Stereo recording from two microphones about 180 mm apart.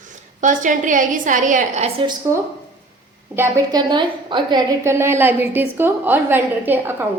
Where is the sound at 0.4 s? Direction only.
45° right (ahead or behind).